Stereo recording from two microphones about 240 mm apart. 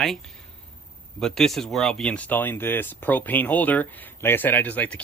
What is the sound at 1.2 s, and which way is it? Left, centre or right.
Speech, centre.